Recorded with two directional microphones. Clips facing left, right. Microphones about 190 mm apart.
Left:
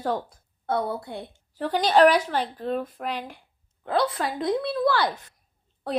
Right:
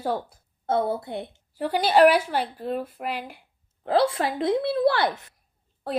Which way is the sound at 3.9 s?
25° right (ahead or behind).